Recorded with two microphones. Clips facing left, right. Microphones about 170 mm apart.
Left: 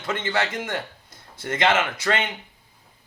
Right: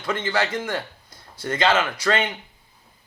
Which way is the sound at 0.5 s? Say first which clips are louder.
Right 2 dB; 25° left (ahead or behind).